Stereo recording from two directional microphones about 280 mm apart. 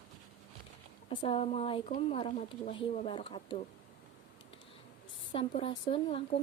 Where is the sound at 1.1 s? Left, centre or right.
Centre.